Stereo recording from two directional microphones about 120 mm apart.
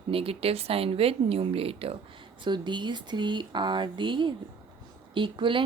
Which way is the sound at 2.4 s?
40° right (ahead or behind).